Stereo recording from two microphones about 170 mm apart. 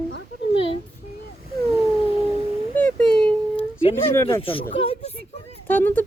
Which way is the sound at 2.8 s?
10° left (ahead or behind).